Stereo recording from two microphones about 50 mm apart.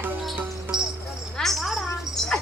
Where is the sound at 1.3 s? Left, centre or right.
Centre.